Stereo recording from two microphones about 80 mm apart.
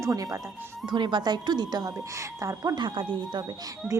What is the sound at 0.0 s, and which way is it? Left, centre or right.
Speech, right.